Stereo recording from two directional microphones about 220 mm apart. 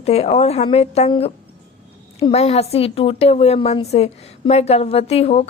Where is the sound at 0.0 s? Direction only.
30° left (ahead or behind).